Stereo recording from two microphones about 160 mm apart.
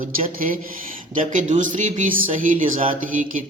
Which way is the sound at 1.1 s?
50° right (ahead or behind).